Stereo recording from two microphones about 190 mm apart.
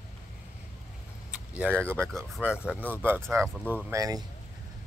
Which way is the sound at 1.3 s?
10° right (ahead or behind).